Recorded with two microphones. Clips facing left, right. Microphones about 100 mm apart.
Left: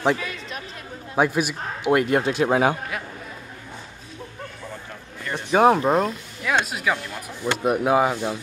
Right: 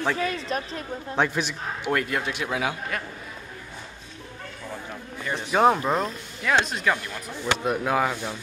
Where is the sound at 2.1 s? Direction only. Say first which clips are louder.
Left 8 dB; 30° left (ahead or behind).